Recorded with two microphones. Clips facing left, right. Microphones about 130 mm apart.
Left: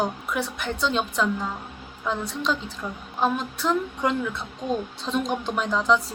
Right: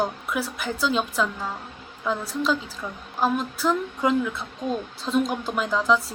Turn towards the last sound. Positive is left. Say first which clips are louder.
# even
turn(degrees=0)  # may be behind; listen again after turning